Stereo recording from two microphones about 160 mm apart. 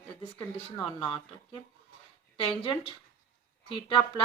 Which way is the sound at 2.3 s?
30° left (ahead or behind).